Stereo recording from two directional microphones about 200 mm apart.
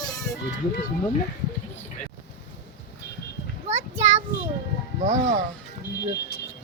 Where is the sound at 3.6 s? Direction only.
35° right (ahead or behind).